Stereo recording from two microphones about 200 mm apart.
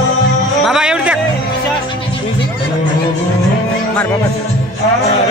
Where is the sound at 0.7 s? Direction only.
5° right (ahead or behind).